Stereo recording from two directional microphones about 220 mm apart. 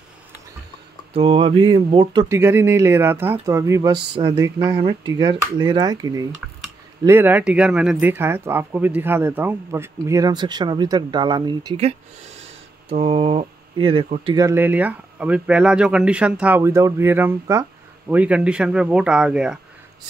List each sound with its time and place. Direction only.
1.1 s speech: 25° right (ahead or behind)
12.9 s speech: 30° right (ahead or behind)
14.3 s speech: 15° right (ahead or behind)